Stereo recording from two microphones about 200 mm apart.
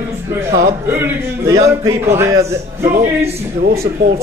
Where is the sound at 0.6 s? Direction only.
10° right (ahead or behind).